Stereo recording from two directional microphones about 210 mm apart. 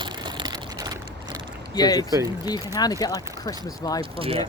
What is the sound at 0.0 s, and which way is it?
Vehicle, 20° right (ahead or behind).